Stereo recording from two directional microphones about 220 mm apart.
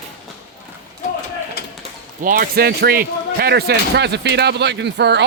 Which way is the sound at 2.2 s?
40° right (ahead or behind).